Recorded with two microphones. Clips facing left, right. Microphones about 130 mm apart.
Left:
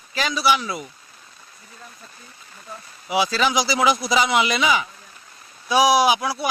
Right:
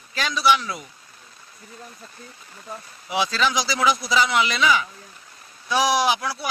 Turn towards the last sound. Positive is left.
turn(degrees=15)  # may be behind; listen again after turning